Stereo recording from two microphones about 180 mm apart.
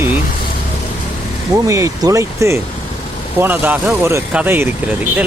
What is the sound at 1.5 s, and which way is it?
Speech, 15° right (ahead or behind).